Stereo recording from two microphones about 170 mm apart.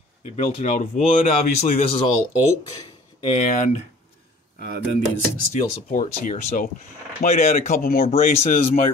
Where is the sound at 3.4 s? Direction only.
40° left (ahead or behind).